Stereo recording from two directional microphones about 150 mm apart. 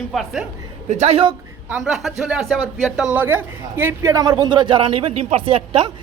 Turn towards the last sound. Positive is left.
turn(degrees=-35)  # may be behind; listen again after turning